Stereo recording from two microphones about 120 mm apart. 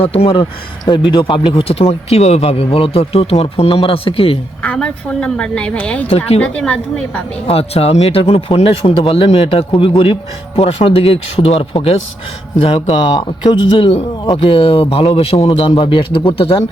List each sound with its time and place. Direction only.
0.0 s speech: 55° left (ahead or behind)
0.9 s speech: 40° left (ahead or behind)
4.6 s a woman's voice: 10° left (ahead or behind)
6.1 s speech: 60° left (ahead or behind)
6.4 s a woman's voice: 10° left (ahead or behind)
7.4 s speech: 55° left (ahead or behind)
13.1 s speech: 40° left (ahead or behind)